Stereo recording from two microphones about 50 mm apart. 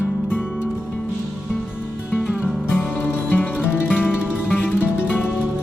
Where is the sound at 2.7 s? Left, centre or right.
Left.